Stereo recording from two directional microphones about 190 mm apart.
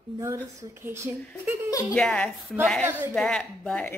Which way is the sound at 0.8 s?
10° right (ahead or behind).